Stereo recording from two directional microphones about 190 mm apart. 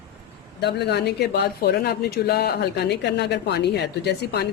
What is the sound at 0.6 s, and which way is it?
Speech, 60° left (ahead or behind).